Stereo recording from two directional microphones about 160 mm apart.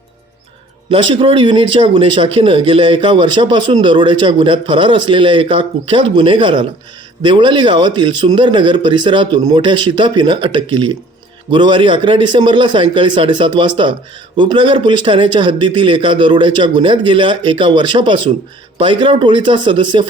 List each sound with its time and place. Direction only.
0.9 s a man's voice: 35° right (ahead or behind)